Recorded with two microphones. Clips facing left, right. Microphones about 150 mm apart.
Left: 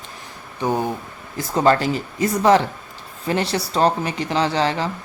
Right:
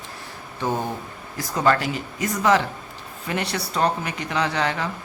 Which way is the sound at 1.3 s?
25° left (ahead or behind).